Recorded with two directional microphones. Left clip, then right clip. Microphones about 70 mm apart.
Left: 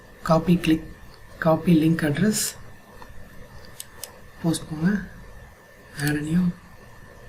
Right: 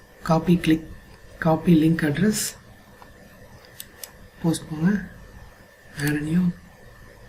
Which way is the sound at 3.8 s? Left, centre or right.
Left.